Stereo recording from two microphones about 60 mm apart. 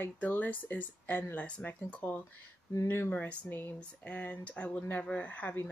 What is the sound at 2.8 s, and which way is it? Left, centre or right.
Speech, left.